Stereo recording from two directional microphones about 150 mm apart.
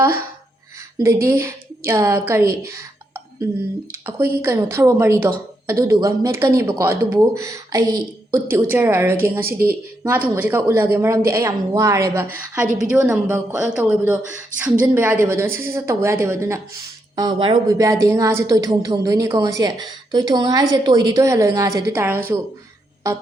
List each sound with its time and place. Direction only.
0.9 s a woman's voice: 20° right (ahead or behind)
4.0 s a woman's voice: 15° right (ahead or behind)
12.6 s a woman's voice: 60° right (ahead or behind)
13.0 s a woman's voice: 20° right (ahead or behind)
13.5 s speech: 5° right (ahead or behind)
14.0 s a woman's voice: 15° right (ahead or behind)
17.2 s a woman's voice: 30° right (ahead or behind)